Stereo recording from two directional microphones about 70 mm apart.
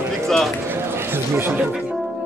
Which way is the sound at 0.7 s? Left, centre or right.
Right.